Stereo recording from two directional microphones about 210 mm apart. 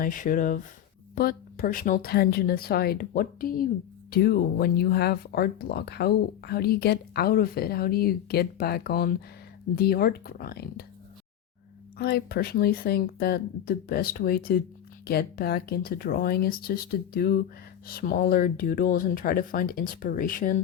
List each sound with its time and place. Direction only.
0.0 s speech: 40° left (ahead or behind)
11.9 s speech: 50° left (ahead or behind)